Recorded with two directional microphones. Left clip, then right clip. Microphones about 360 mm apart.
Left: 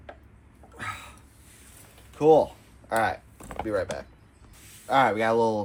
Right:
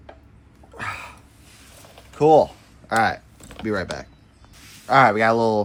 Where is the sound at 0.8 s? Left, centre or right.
Right.